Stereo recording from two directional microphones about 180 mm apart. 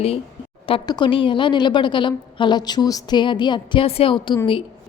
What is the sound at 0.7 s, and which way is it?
A woman's voice, 25° left (ahead or behind).